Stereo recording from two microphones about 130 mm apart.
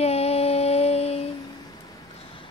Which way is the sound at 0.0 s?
55° left (ahead or behind).